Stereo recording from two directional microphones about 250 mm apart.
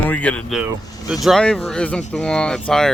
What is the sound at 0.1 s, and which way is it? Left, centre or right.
Speech, centre.